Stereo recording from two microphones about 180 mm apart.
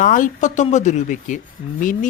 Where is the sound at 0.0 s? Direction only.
45° left (ahead or behind).